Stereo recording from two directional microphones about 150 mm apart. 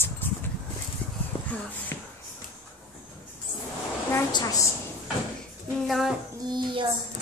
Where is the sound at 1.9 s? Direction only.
20° left (ahead or behind).